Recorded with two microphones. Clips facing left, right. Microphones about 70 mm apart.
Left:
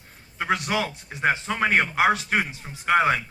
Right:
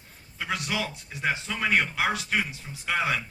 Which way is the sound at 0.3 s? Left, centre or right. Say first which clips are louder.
Left 6 dB; left.